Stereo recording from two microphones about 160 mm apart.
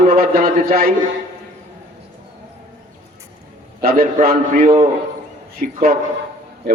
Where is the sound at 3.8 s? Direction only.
60° right (ahead or behind).